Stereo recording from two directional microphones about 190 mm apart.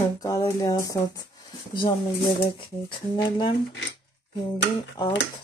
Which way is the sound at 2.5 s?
25° left (ahead or behind).